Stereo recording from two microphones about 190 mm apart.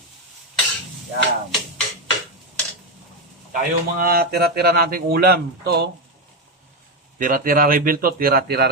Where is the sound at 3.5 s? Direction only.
50° right (ahead or behind).